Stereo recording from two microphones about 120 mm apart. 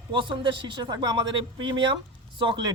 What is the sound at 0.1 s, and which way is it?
Speech, 40° right (ahead or behind).